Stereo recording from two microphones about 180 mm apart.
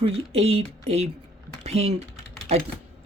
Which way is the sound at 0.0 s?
35° right (ahead or behind).